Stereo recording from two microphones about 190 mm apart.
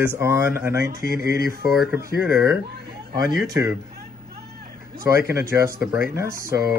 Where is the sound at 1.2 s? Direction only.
50° left (ahead or behind).